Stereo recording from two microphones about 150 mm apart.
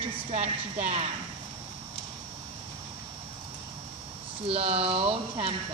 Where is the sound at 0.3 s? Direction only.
50° right (ahead or behind).